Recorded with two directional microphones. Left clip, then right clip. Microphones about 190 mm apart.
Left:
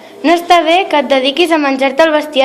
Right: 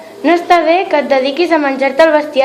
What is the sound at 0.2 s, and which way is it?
A woman's voice, 40° left (ahead or behind).